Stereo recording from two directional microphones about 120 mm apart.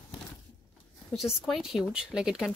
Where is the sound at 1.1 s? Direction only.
Centre (ahead or behind).